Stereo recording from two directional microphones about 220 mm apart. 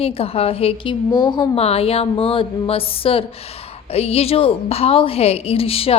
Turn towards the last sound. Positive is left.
turn(degrees=25)  # may be behind; listen again after turning